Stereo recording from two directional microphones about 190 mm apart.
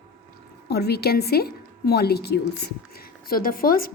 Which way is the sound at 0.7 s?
55° left (ahead or behind).